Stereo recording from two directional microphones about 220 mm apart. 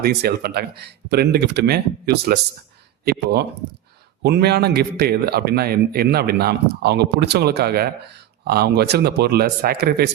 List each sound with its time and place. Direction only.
0.0 s a man's voice: 45° right (ahead or behind)